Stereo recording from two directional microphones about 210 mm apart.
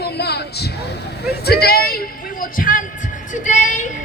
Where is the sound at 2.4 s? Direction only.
40° left (ahead or behind).